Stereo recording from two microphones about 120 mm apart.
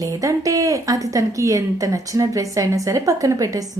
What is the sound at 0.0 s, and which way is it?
A woman's voice, 30° right (ahead or behind).